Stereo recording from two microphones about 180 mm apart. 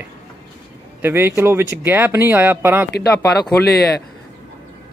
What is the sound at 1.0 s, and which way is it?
Speech, 15° right (ahead or behind).